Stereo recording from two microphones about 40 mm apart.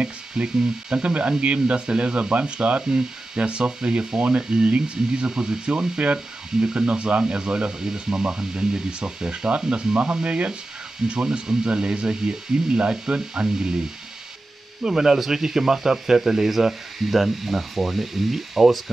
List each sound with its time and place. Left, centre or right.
0.0 s speech: right
14.8 s speech: centre